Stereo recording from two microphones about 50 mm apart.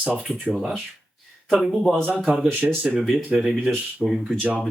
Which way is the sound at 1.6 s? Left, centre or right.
Centre.